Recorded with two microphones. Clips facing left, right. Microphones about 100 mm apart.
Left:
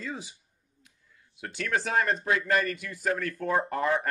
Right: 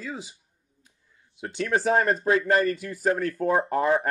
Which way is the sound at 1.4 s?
25° right (ahead or behind).